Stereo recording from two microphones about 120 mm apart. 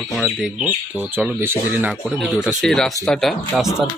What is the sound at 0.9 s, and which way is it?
Speech, 15° right (ahead or behind).